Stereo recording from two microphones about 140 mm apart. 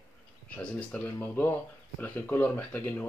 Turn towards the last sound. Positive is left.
turn(degrees=10)  # may be behind; listen again after turning